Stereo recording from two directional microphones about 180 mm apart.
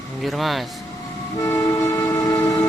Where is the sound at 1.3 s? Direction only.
20° left (ahead or behind).